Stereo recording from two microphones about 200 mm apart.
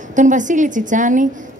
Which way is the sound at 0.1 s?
40° right (ahead or behind).